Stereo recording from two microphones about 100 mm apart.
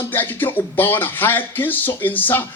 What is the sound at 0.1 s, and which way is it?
Speech, 20° left (ahead or behind).